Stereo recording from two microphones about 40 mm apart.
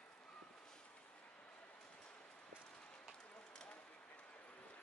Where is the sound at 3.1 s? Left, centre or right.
Left.